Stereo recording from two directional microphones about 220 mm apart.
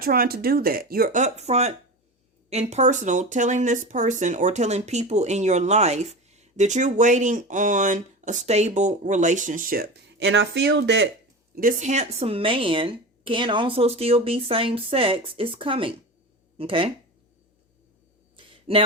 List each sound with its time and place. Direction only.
0.0 s speech: 40° right (ahead or behind)
11.5 s a woman's voice: 40° right (ahead or behind)
18.7 s a woman's voice: 25° right (ahead or behind)